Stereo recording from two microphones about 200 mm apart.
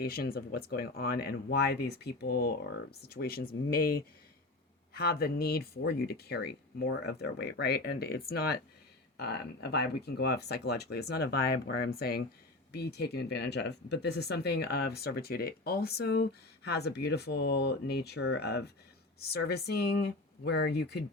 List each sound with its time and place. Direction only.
0.0 s speech: 50° left (ahead or behind)